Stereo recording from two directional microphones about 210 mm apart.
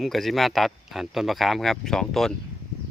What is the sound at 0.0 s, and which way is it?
Speech, centre (ahead or behind).